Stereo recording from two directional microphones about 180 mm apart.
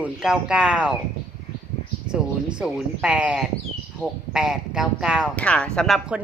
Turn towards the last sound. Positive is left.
turn(degrees=0)  # may be behind; listen again after turning